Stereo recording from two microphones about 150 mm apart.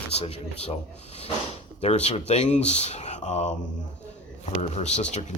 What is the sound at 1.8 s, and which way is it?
Speech, 45° left (ahead or behind).